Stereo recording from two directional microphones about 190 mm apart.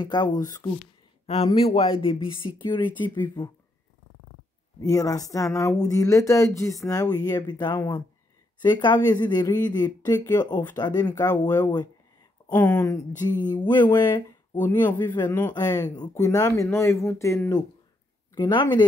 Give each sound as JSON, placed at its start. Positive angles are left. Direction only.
{"t": 0.0, "sound": "speech", "side_deg": 20}
{"t": 1.2, "sound": "speech", "side_deg": 30}
{"t": 4.8, "sound": "speech", "side_deg": 20}
{"t": 15.2, "sound": "speech", "side_deg": 10}
{"t": 18.3, "sound": "speech", "side_deg": 25}